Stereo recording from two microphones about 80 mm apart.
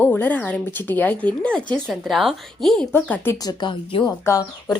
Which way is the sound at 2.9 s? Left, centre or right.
Left.